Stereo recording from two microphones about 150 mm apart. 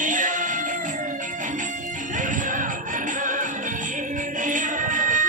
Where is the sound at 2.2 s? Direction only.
60° right (ahead or behind).